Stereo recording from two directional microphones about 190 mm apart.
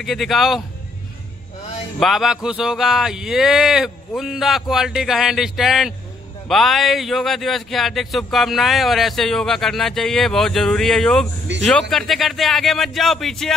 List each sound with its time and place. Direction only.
0.0 s speech: centre (ahead or behind)
2.0 s speech: centre (ahead or behind)
11.5 s speech: 70° right (ahead or behind)
11.9 s speech: centre (ahead or behind)